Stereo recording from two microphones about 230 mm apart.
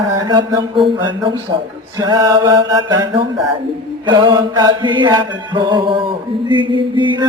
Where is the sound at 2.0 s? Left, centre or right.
Centre.